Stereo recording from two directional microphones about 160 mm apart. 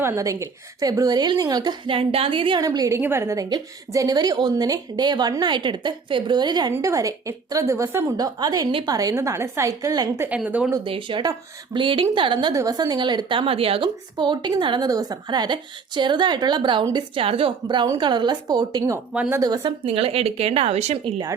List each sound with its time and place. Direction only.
0.0 s a woman's voice: 20° right (ahead or behind)
10.2 s speech: 10° right (ahead or behind)
10.8 s a woman's voice: 30° right (ahead or behind)
19.1 s speech: 10° right (ahead or behind)
19.4 s speech: 25° right (ahead or behind); by 21.1 s 40° right (ahead or behind)